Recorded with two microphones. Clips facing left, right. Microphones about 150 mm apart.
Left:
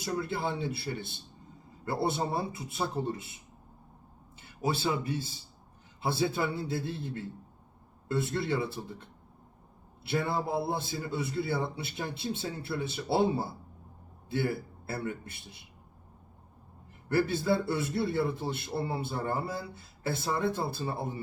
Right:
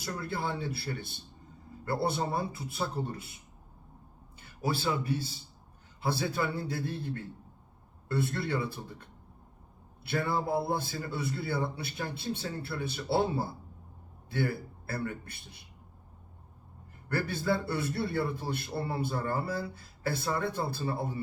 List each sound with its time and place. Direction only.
0.0 s a man's voice: 20° left (ahead or behind)
1.8 s a man's voice: 20° left (ahead or behind)
4.4 s a man's voice: 20° left (ahead or behind)
10.0 s a man's voice: 25° left (ahead or behind)
14.3 s speech: 20° left (ahead or behind)
17.1 s a man's voice: 25° left (ahead or behind)